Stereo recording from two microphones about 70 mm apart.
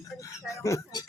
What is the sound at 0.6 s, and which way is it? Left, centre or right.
Speech, left.